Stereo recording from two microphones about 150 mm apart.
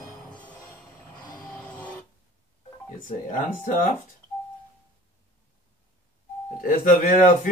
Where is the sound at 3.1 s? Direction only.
60° left (ahead or behind).